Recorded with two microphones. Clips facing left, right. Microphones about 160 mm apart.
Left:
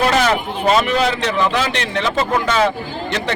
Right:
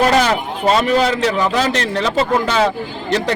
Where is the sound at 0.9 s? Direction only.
40° right (ahead or behind).